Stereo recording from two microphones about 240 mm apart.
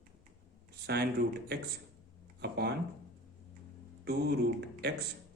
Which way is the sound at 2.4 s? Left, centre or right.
Right.